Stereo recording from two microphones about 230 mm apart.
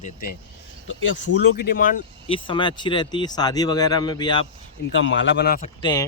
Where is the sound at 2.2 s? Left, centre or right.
Left.